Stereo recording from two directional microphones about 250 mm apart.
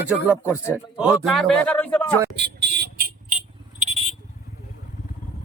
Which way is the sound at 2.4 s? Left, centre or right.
Right.